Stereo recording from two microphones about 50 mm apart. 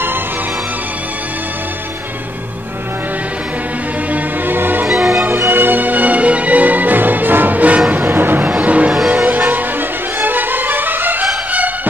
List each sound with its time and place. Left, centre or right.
4.1 s music: right
4.8 s music: centre
5.5 s music: right
7.9 s vehicle: right
8.5 s music: right
9.8 s music: right